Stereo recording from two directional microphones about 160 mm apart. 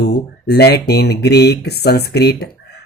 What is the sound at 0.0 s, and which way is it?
Speech, 90° left.